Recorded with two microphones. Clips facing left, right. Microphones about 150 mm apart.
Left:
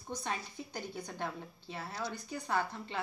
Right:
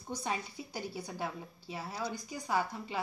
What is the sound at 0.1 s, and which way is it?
Speech, 10° right (ahead or behind).